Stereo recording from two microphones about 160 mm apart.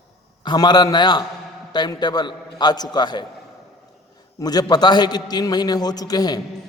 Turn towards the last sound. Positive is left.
turn(degrees=25)  # may be behind; listen again after turning